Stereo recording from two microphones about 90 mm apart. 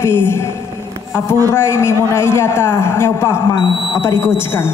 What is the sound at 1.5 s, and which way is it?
A man's voice, 30° left (ahead or behind).